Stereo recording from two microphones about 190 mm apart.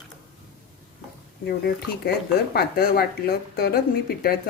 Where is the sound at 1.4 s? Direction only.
55° left (ahead or behind).